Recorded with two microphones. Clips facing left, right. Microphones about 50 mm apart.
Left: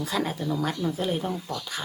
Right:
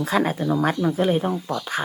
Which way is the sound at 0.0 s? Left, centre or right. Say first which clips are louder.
Right 6 dB; right.